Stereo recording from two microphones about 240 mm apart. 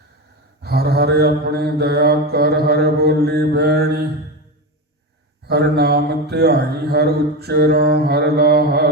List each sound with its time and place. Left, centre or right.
0.6 s mantra: right
5.5 s mantra: right